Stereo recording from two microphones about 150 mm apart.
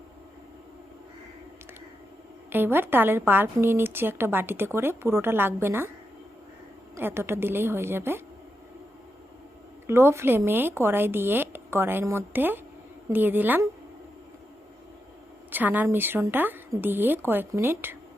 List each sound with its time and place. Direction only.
2.5 s a woman's voice: 15° right (ahead or behind)
6.9 s a woman's voice: 15° right (ahead or behind)
9.8 s a woman's voice: 15° right (ahead or behind)
15.5 s a woman's voice: 10° right (ahead or behind)